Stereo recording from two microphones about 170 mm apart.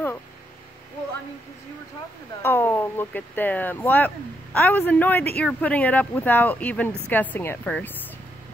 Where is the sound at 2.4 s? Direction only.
10° left (ahead or behind).